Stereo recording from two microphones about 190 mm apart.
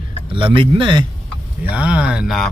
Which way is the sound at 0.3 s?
25° right (ahead or behind).